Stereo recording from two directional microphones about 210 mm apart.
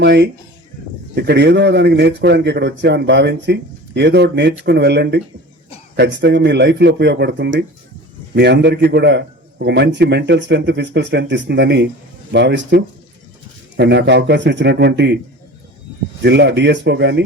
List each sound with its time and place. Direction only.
0.0 s a man's voice: 55° right (ahead or behind)
16.2 s a man's voice: 55° right (ahead or behind)